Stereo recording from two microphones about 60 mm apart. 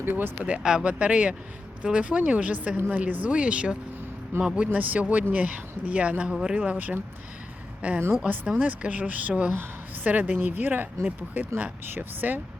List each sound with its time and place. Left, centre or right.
0.0 s speech: right
0.4 s speech: centre
6.6 s speech: right
9.5 s a sound: right
10.1 s speech: right